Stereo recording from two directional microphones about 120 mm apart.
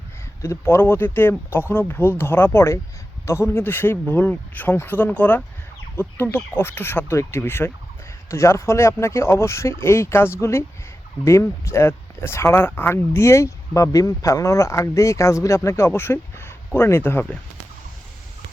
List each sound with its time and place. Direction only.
0.4 s speech: 20° left (ahead or behind)